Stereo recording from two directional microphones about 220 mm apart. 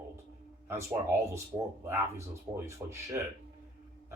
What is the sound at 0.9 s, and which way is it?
Speech, 10° right (ahead or behind).